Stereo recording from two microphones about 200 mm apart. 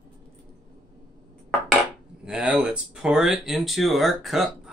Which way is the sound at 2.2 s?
5° right (ahead or behind).